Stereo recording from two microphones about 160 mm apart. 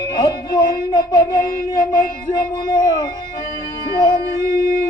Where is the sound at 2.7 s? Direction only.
30° left (ahead or behind).